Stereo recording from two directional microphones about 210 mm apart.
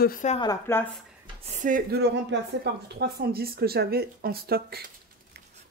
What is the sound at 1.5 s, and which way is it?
A woman's voice, 40° right (ahead or behind).